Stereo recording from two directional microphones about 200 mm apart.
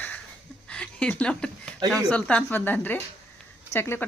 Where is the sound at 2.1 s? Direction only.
5° left (ahead or behind).